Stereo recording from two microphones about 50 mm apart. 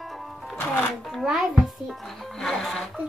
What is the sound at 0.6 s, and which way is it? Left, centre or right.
Shuffling cards, left.